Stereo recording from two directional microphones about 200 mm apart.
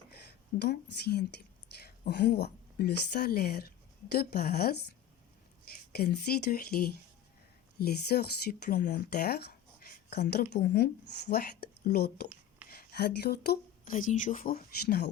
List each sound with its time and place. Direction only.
0.6 s speech: 55° left (ahead or behind)
1.7 s a sound: 55° left (ahead or behind)
2.0 s speech: 55° left (ahead or behind)